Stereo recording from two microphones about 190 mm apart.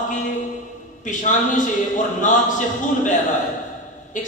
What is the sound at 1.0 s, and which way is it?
A man's voice, 40° left (ahead or behind).